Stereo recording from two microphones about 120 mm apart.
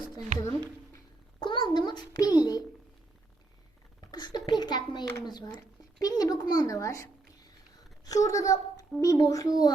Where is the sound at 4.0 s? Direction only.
35° left (ahead or behind).